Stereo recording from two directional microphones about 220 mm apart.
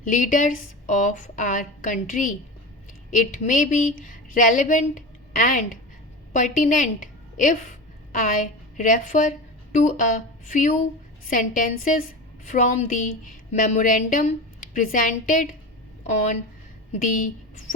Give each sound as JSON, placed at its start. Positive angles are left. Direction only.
{"t": 0.0, "sound": "a woman's voice", "side_deg": 35}
{"t": 8.3, "sound": "a woman's voice", "side_deg": 35}
{"t": 16.9, "sound": "a woman's voice", "side_deg": 35}